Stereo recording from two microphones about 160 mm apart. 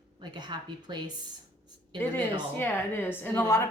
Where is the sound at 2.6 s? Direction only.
10° left (ahead or behind).